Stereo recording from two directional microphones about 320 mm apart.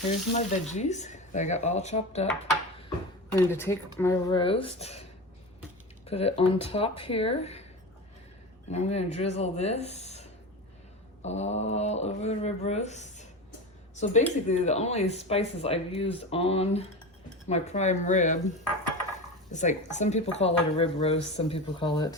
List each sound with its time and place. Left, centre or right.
0.1 s speech: left
3.3 s speech: centre
6.1 s speech: centre
8.7 s speech: centre